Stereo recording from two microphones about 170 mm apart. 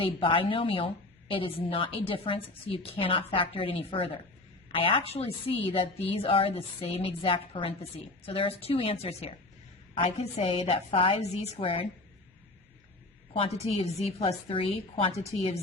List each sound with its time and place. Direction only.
0.0 s a woman's voice: 30° left (ahead or behind)
13.3 s a woman's voice: 35° left (ahead or behind)